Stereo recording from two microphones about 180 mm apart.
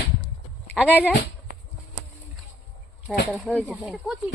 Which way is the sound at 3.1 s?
Centre (ahead or behind).